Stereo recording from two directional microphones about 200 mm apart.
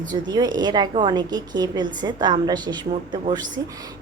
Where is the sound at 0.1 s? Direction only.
20° right (ahead or behind).